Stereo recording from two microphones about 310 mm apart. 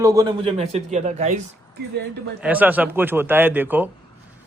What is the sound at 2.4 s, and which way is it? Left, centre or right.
A man's voice, centre.